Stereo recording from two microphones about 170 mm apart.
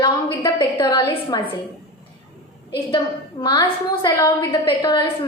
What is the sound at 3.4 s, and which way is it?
A woman's voice, 25° left (ahead or behind).